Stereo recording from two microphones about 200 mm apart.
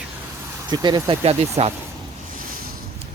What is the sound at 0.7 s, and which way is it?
Speech, 20° right (ahead or behind).